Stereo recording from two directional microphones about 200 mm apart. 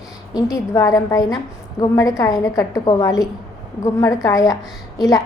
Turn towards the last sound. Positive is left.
turn(degrees=20)  # may be behind; listen again after turning